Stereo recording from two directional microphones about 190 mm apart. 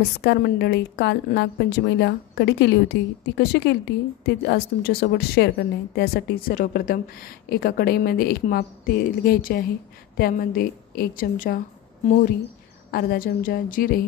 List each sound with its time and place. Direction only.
0.2 s a woman's voice: 60° left (ahead or behind)
12.9 s a woman's voice: 50° left (ahead or behind)